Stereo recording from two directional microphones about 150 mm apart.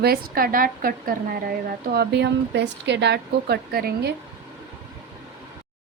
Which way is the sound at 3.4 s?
90° right.